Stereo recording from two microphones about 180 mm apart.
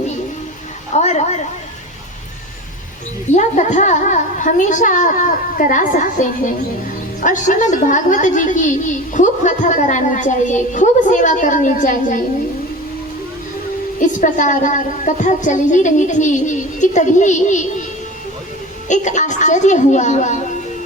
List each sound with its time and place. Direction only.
0.9 s a sound: 40° left (ahead or behind)
3.3 s a woman's voice: 40° left (ahead or behind)
14.0 s a woman's voice: 45° left (ahead or behind)
18.9 s a woman's voice: 40° left (ahead or behind)